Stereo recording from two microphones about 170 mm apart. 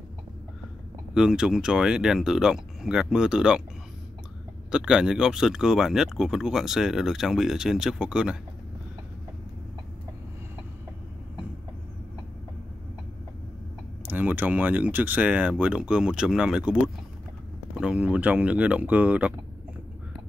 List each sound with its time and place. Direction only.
1.1 s speech: 5° right (ahead or behind)
4.6 s speech: 5° right (ahead or behind)
14.0 s speech: 10° right (ahead or behind)